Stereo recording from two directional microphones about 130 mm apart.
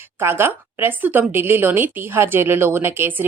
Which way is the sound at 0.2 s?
20° right (ahead or behind).